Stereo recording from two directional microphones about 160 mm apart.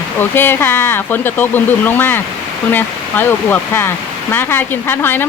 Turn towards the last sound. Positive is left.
turn(degrees=15)  # may be behind; listen again after turning